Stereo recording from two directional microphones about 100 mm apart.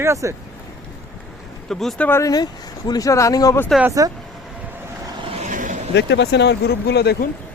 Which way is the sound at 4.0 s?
35° right (ahead or behind).